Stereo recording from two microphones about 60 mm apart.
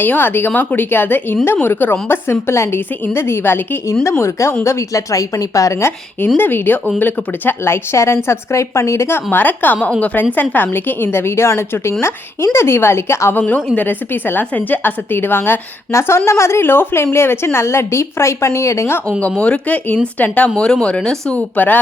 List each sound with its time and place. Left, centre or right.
0.0 s a woman's voice: left
4.2 s a woman's voice: left
5.1 s a woman's voice: left
6.2 s a woman's voice: left
13.7 s a woman's voice: left
19.2 s speech: left
20.6 s speech: centre
21.3 s speech: left